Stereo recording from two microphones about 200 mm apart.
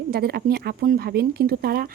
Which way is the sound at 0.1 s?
50° right (ahead or behind).